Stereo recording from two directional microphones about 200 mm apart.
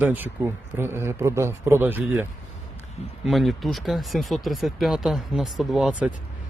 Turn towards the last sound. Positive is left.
turn(degrees=-5)  # may be behind; listen again after turning